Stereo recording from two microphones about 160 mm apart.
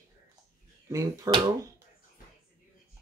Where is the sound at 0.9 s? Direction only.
20° right (ahead or behind).